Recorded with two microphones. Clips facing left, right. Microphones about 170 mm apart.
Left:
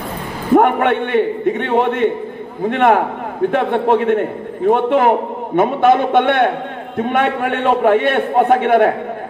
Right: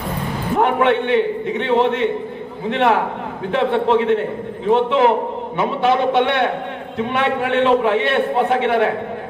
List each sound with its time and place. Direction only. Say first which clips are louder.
0.6 s a man's voice: left 2 dB; 50° left (ahead or behind)